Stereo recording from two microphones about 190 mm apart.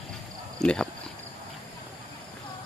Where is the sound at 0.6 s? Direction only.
5° left (ahead or behind).